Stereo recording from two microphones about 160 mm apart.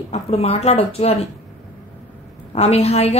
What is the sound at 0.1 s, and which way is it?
A woman's voice, 40° left (ahead or behind).